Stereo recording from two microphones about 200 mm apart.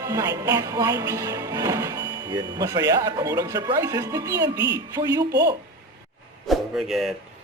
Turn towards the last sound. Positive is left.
turn(degrees=0)  # may be behind; listen again after turning